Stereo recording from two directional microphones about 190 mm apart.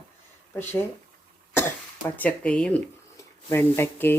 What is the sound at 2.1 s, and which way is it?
Speech, 10° left (ahead or behind).